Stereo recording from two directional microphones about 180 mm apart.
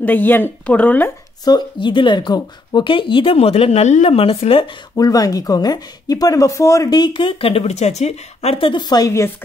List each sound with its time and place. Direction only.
0.0 s speech: 10° left (ahead or behind)
1.4 s speech: 25° left (ahead or behind)
4.9 s speech: 20° left (ahead or behind)